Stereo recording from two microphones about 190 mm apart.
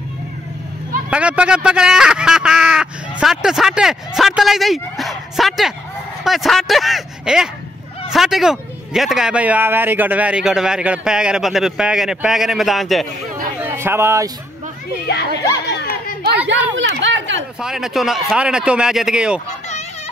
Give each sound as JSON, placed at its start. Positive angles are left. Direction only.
{"t": 1.1, "sound": "a man's voice", "side_deg": -5}
{"t": 13.6, "sound": "speech", "side_deg": -10}
{"t": 15.0, "sound": "a child's voice", "side_deg": 65}
{"t": 15.6, "sound": "chatter", "side_deg": 60}
{"t": 16.7, "sound": "a sound", "side_deg": -75}
{"t": 17.6, "sound": "a man's voice", "side_deg": -5}